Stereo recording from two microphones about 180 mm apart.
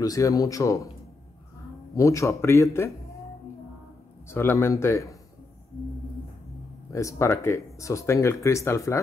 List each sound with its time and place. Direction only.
0.0 s speech: 20° left (ahead or behind)
2.0 s speech: 15° left (ahead or behind)
4.3 s speech: 15° left (ahead or behind)
6.9 s speech: 15° left (ahead or behind)